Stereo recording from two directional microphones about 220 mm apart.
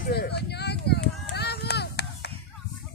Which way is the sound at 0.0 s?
45° left (ahead or behind).